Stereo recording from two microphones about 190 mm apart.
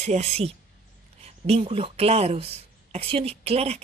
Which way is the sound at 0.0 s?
35° right (ahead or behind).